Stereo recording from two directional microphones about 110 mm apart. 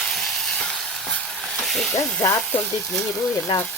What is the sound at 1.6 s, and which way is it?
Snake, centre (ahead or behind).